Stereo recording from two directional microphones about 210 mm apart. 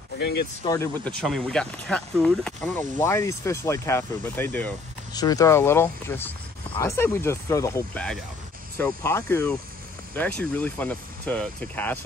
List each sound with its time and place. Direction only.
0.2 s speech: 50° left (ahead or behind)
0.7 s speech: 15° left (ahead or behind)
1.2 s speech: centre (ahead or behind)